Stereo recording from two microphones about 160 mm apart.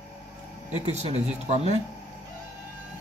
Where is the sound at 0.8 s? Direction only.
40° right (ahead or behind).